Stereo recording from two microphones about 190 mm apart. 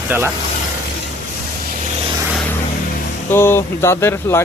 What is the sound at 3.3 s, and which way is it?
Speech, 10° left (ahead or behind).